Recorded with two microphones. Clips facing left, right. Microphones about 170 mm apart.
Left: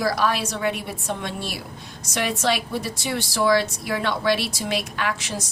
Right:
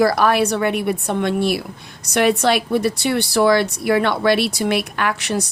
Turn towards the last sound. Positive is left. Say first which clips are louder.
# right 6 dB
turn(degrees=-65)  # may be behind; listen again after turning